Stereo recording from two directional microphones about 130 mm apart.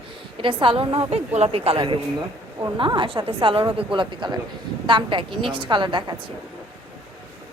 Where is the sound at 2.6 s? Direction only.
40° right (ahead or behind).